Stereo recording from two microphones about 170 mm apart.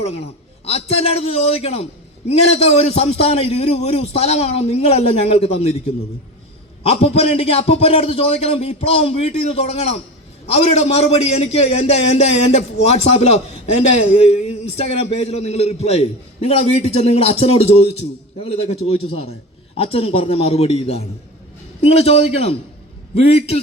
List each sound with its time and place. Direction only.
0.6 s a man's voice: 35° left (ahead or behind)
6.9 s a man's voice: 35° left (ahead or behind)